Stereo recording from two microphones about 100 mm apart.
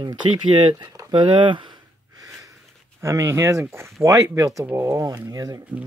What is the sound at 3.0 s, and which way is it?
Speech, 30° right (ahead or behind).